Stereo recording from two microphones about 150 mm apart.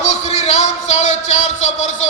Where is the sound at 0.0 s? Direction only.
50° left (ahead or behind).